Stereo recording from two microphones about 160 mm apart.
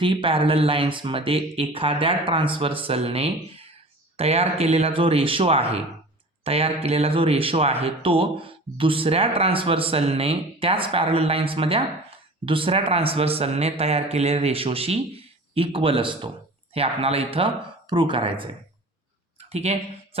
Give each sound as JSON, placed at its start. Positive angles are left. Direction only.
{"t": 0.0, "sound": "speech", "side_deg": -30}
{"t": 19.5, "sound": "speech", "side_deg": -40}